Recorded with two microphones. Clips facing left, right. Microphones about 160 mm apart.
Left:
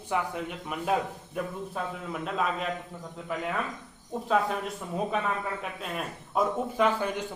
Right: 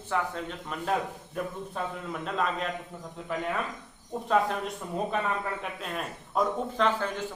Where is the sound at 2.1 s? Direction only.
5° left (ahead or behind).